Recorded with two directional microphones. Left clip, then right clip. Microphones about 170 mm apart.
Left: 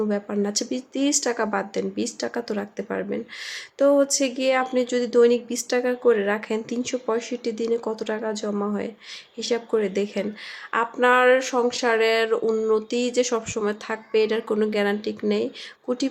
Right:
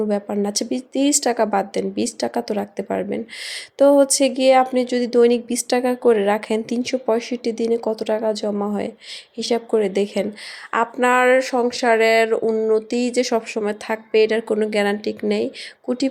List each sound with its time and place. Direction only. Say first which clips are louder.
0.1 s speech: right 3 dB; 20° right (ahead or behind)